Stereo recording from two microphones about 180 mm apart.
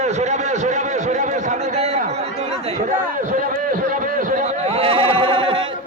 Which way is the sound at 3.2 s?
50° right (ahead or behind).